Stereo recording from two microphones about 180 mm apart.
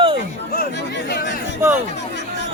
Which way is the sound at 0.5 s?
60° left (ahead or behind).